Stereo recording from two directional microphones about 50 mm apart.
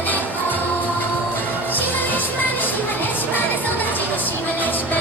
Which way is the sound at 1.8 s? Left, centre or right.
Left.